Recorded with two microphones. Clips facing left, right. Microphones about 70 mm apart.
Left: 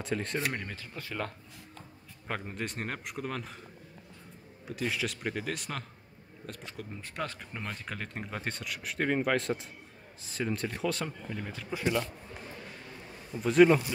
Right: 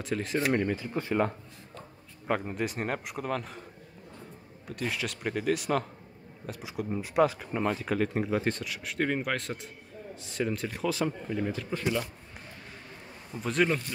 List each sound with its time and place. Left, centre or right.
0.0 s speech: centre
0.5 s speech: centre
0.9 s speech: right
2.2 s speech: centre
4.6 s speech: centre
11.7 s speech: centre
13.3 s speech: centre